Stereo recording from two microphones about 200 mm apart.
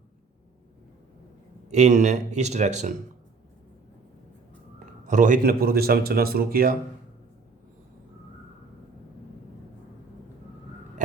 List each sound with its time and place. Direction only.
1.6 s a man's voice: 35° right (ahead or behind)
5.0 s a man's voice: 40° right (ahead or behind)